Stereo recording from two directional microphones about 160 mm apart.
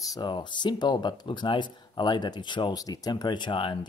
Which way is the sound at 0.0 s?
25° left (ahead or behind).